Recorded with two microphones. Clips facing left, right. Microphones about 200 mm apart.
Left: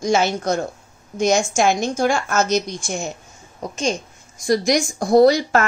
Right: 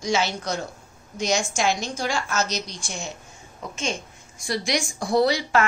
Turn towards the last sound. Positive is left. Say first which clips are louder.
# left 7 dB
turn(degrees=45)  # may be behind; listen again after turning